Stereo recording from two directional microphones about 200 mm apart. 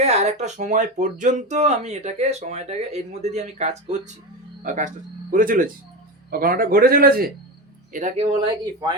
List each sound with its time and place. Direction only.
0.0 s a man's voice: 35° right (ahead or behind)
7.9 s speech: 35° right (ahead or behind)